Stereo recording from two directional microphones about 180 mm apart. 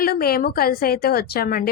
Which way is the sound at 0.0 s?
55° left (ahead or behind).